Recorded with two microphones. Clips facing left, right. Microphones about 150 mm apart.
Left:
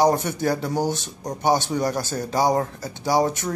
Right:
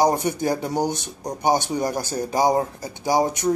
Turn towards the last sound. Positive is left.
turn(degrees=-15)  # may be behind; listen again after turning